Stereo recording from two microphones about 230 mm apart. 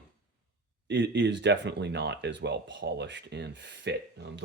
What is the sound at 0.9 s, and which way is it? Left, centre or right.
Speech, right.